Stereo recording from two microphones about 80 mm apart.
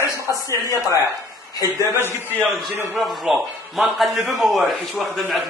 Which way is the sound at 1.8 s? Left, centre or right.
Left.